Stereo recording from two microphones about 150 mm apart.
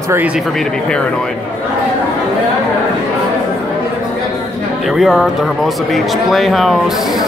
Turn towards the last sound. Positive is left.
turn(degrees=0)  # may be behind; listen again after turning